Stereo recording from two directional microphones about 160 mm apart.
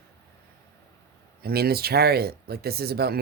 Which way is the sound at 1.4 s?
75° right (ahead or behind).